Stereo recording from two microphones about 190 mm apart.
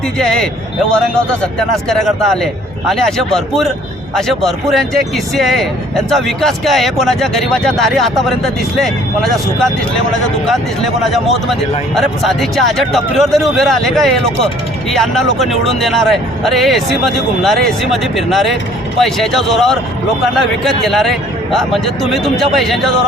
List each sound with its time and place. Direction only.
0.2 s speech: 5° left (ahead or behind)
11.9 s speech: centre (ahead or behind)